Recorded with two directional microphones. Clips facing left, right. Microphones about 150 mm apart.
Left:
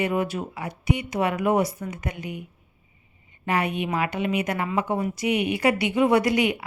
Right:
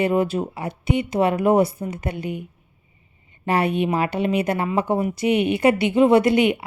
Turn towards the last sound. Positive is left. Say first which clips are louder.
# right 5 dB
turn(degrees=-25)  # may be behind; listen again after turning